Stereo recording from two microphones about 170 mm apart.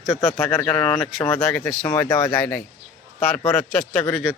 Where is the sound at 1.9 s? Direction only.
20° left (ahead or behind).